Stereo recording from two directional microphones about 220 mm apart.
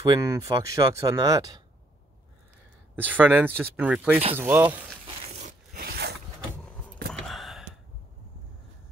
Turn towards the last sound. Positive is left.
turn(degrees=0)  # may be behind; listen again after turning